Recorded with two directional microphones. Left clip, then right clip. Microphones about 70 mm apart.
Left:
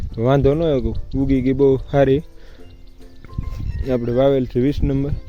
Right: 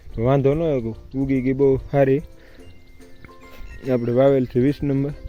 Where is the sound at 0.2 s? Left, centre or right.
Left.